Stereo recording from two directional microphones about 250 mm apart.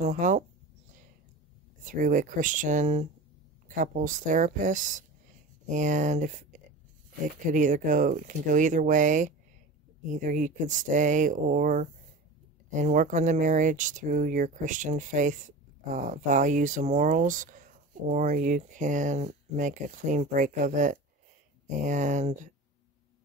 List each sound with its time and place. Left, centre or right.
0.0 s speech: right
1.9 s speech: right